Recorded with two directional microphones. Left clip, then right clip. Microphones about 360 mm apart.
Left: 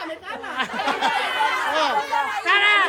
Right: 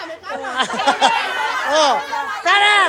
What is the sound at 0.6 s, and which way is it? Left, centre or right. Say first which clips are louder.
Speech: right 7 dB; centre.